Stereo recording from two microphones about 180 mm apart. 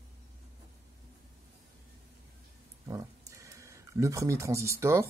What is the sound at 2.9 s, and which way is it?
Speech, 20° right (ahead or behind).